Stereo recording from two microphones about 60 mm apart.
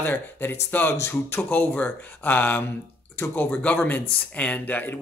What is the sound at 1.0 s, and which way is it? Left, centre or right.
Speech, left.